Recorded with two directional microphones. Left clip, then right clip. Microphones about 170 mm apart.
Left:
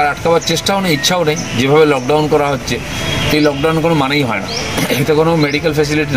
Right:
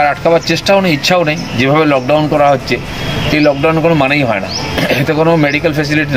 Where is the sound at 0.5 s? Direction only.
Centre (ahead or behind).